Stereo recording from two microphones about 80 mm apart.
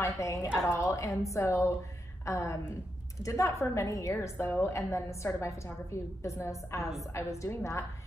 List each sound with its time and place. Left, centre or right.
0.0 s a woman's voice: left